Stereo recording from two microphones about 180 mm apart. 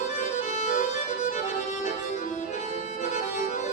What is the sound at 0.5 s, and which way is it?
Music, 40° left (ahead or behind).